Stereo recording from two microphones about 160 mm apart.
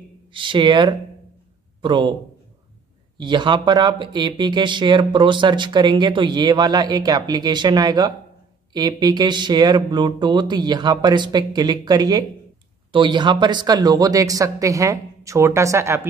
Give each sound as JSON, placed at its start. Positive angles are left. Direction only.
{"t": 0.3, "sound": "a man's voice", "side_deg": -30}
{"t": 3.2, "sound": "speech", "side_deg": -30}